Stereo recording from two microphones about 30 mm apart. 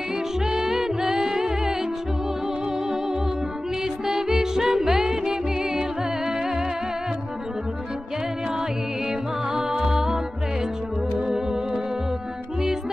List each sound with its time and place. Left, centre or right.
0.5 s music: centre
4.0 s music: centre
9.5 s music: centre
11.2 s music: centre